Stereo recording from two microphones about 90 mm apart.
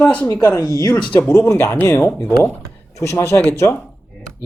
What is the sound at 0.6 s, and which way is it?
Speech, 35° left (ahead or behind).